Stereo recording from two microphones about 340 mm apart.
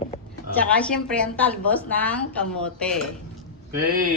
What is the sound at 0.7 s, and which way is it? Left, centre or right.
A woman's voice, centre.